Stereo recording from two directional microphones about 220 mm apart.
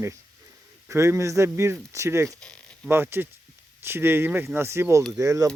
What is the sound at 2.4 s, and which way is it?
Zipper, 5° left (ahead or behind).